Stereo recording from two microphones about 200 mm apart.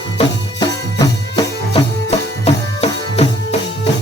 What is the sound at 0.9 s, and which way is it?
Music, 20° left (ahead or behind).